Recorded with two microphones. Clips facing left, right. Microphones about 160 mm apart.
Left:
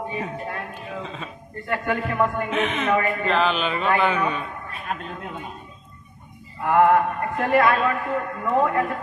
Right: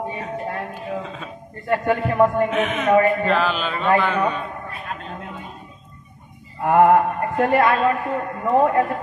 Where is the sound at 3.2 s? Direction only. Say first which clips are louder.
Right 1 dB; centre (ahead or behind).